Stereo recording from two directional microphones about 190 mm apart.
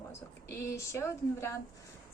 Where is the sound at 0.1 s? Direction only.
15° left (ahead or behind).